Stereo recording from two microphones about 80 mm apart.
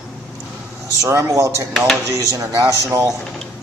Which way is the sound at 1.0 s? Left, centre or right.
Right.